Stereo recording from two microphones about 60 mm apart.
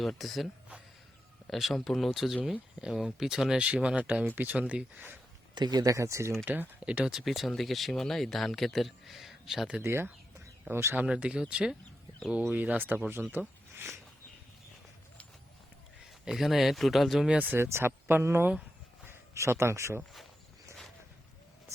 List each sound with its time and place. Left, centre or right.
0.0 s speech: centre
1.5 s speech: centre
4.4 s speech: right
6.0 s speech: right
6.4 s speech: right
6.7 s speech: right
7.0 s speech: centre
9.8 s speech: right
10.9 s speech: centre
12.4 s speech: right
13.7 s a sound: right
16.2 s speech: centre
17.2 s speech: right
17.5 s speech: right